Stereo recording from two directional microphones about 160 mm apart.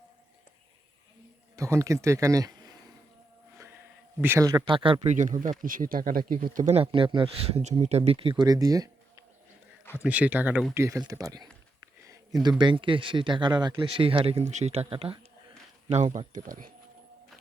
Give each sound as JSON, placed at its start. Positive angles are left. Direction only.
{"t": 1.5, "sound": "speech", "side_deg": -20}
{"t": 4.2, "sound": "speech", "side_deg": -15}
{"t": 5.0, "sound": "speech", "side_deg": -50}
{"t": 6.7, "sound": "speech", "side_deg": -35}
{"t": 10.0, "sound": "speech", "side_deg": -10}
{"t": 15.9, "sound": "speech", "side_deg": -45}